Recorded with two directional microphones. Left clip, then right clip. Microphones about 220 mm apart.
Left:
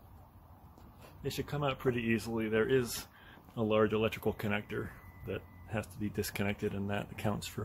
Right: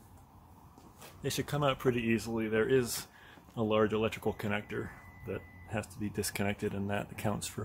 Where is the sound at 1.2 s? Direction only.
30° right (ahead or behind).